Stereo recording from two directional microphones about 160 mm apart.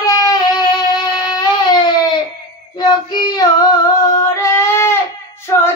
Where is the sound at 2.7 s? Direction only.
25° left (ahead or behind).